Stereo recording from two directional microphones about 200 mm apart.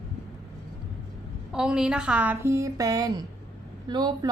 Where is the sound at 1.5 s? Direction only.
5° right (ahead or behind).